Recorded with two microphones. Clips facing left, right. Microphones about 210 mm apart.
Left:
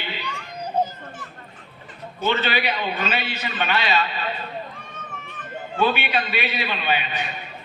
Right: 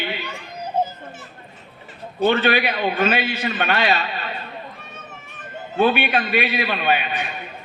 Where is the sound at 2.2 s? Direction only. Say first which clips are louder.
Right 5 dB; 55° right (ahead or behind).